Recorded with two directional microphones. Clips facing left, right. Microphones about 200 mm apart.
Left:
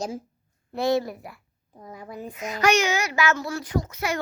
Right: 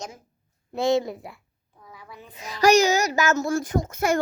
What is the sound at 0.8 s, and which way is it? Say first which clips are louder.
Speech: right 1 dB; 20° right (ahead or behind).